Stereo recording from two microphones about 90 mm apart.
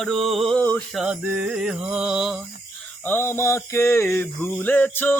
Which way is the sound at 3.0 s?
25° left (ahead or behind).